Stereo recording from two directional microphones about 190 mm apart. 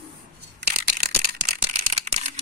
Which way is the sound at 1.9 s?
35° right (ahead or behind).